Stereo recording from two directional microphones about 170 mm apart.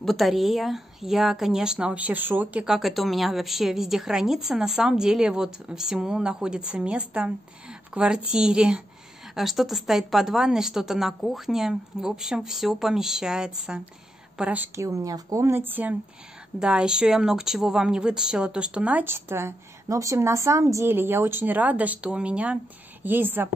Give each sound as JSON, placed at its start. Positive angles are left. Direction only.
{"t": 0.0, "sound": "a woman's voice", "side_deg": 0}